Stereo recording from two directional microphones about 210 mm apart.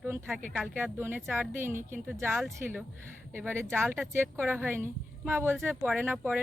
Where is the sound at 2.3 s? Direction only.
Centre (ahead or behind).